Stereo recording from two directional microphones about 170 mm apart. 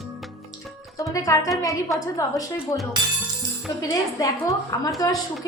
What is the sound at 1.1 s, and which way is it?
A woman's voice, 20° left (ahead or behind).